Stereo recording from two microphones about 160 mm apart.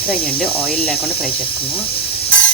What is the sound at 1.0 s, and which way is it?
Speech, 35° left (ahead or behind).